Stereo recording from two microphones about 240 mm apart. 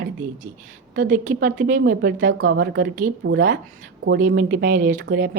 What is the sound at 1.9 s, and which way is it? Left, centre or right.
Speech, right.